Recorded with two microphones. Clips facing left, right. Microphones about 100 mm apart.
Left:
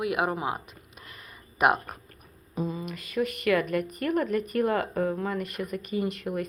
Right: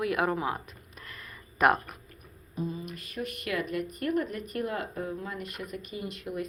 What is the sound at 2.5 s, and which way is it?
Speech, 90° left.